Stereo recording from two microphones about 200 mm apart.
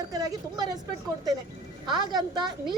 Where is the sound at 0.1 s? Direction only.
20° right (ahead or behind).